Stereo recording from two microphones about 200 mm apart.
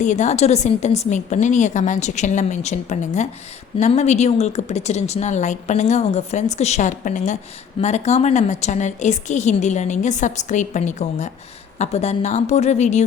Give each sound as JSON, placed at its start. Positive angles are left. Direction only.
{"t": 0.0, "sound": "a woman's voice", "side_deg": 35}